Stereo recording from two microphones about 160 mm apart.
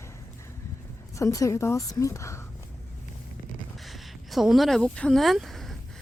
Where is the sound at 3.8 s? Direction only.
Centre (ahead or behind).